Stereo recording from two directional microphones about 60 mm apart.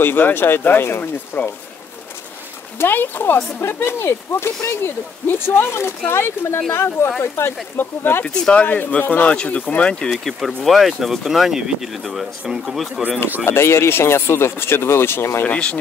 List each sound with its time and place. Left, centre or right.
0.0 s speech: left
2.8 s speech: left
3.6 s speech: left
8.3 s speech: centre
10.2 s speech: centre
13.5 s speech: left
15.4 s speech: left